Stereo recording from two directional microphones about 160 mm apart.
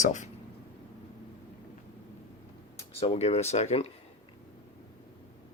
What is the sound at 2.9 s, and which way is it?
Speech, 40° left (ahead or behind).